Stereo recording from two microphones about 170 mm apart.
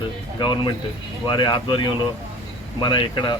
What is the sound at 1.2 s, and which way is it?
Speech, 25° left (ahead or behind).